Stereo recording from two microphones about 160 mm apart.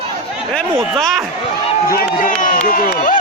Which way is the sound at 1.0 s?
Centre (ahead or behind).